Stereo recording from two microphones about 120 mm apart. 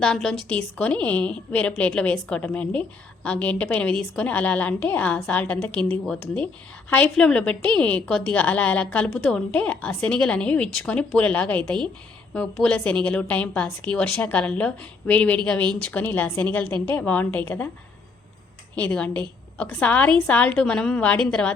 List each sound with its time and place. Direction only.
0.0 s a woman's voice: 5° left (ahead or behind)
18.8 s a woman's voice: 10° left (ahead or behind)